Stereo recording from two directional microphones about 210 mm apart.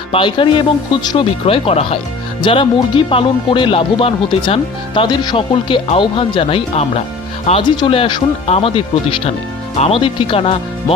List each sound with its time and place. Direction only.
0.1 s speech: 25° left (ahead or behind)